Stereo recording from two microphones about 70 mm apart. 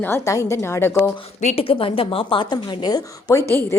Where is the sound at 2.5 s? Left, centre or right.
Left.